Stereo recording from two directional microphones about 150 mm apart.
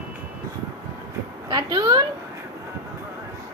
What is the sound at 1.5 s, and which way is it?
Speech, 25° right (ahead or behind).